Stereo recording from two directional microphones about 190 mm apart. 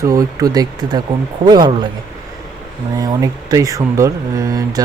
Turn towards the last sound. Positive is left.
turn(degrees=-20)  # may be behind; listen again after turning